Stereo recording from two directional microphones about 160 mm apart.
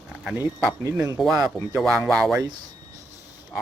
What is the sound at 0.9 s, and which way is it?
Speech, 20° right (ahead or behind).